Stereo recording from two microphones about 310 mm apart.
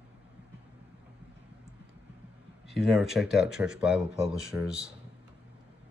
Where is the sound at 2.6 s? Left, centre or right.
Centre.